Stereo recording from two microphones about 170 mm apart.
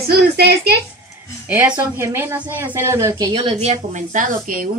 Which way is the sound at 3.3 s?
40° right (ahead or behind).